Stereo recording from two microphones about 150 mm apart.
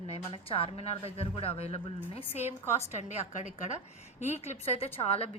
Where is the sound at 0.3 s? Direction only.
40° left (ahead or behind).